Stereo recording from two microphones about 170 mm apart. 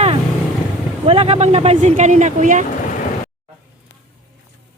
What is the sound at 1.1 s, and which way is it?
Speech, 35° right (ahead or behind).